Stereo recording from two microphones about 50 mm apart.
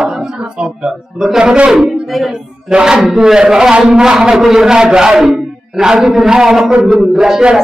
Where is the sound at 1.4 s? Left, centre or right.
Right.